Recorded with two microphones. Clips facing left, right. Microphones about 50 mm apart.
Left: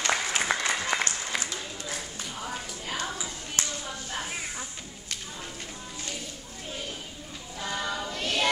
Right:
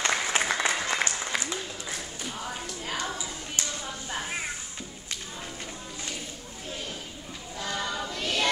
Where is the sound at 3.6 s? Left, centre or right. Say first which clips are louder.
Left 2 dB; left.